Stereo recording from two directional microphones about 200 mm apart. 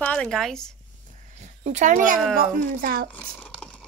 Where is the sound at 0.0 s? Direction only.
5° left (ahead or behind).